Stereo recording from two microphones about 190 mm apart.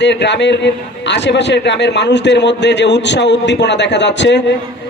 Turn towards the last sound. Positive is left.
turn(degrees=70)  # may be behind; listen again after turning